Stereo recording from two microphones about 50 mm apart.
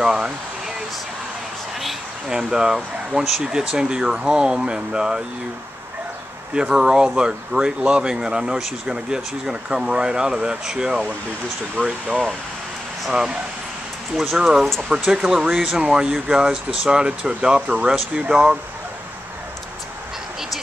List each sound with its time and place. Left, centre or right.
0.0 s speech: centre
2.2 s speech: centre
6.5 s speech: centre
14.1 s speech: centre